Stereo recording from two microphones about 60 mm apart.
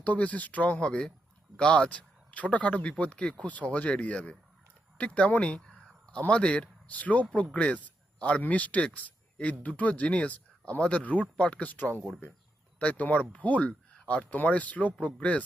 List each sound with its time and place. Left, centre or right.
0.0 s speech: left
14.3 s speech: left